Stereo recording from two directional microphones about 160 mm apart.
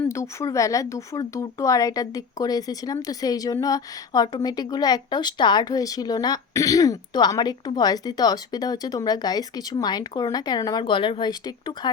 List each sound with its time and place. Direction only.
0.0 s speech: 15° left (ahead or behind)